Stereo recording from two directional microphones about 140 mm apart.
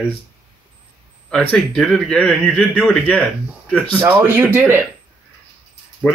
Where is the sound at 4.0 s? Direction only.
15° right (ahead or behind).